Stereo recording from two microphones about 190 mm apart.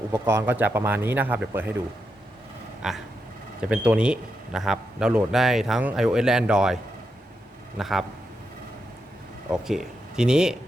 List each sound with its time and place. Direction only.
0.1 s speech: 15° right (ahead or behind)
2.8 s a man's voice: 5° right (ahead or behind)
7.8 s a man's voice: centre (ahead or behind)
9.5 s speech: 5° right (ahead or behind)